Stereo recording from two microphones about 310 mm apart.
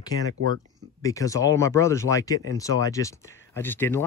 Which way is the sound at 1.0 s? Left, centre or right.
Centre.